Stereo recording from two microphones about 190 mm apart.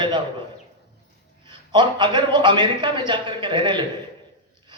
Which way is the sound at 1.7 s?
25° right (ahead or behind).